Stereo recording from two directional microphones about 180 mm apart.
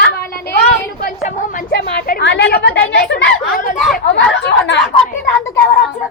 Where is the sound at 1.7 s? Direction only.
65° left (ahead or behind).